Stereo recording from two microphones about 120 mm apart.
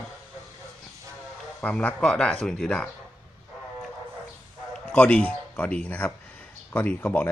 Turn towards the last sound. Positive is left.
turn(degrees=15)  # may be behind; listen again after turning